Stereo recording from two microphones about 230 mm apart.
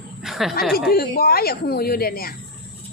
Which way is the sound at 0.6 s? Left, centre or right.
Centre.